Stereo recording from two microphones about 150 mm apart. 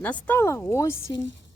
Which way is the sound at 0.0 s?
10° left (ahead or behind).